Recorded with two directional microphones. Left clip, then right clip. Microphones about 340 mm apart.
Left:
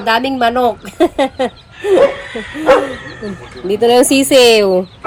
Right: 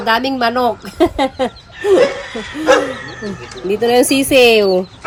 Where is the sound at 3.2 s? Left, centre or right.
Centre.